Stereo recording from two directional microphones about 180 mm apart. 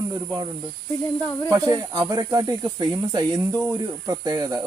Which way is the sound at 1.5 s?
20° right (ahead or behind).